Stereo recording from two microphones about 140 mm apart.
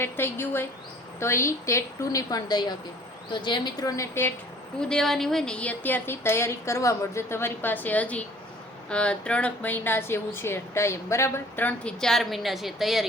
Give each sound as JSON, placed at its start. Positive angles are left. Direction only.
{"t": 0.0, "sound": "a woman's voice", "side_deg": 15}
{"t": 4.9, "sound": "a woman's voice", "side_deg": 5}